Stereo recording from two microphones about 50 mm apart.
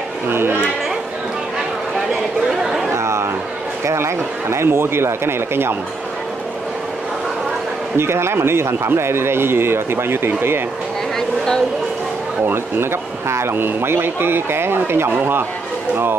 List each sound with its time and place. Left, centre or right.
0.3 s speech: right
2.6 s a sound: centre
2.9 s a sound: right
3.8 s a man's voice: right
8.0 s speech: right
11.1 s vehicle: centre
13.3 s speech: right